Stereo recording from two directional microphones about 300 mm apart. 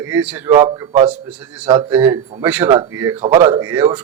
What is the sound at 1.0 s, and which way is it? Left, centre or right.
Speech, centre.